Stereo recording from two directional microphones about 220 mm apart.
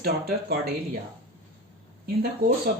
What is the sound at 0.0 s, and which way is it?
Speech, 45° right (ahead or behind).